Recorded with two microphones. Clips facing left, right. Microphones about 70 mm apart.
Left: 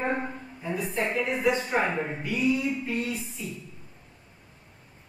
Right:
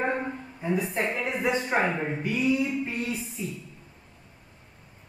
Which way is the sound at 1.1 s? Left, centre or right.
Right.